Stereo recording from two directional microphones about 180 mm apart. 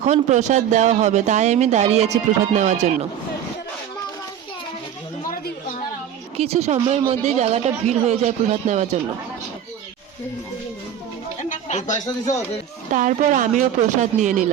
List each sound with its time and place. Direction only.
0.0 s speech: 40° right (ahead or behind)
6.3 s speech: 35° right (ahead or behind)
11.4 s speech: 40° left (ahead or behind)
12.9 s a woman's voice: 45° right (ahead or behind)